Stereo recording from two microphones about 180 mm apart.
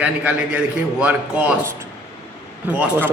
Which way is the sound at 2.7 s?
5° right (ahead or behind).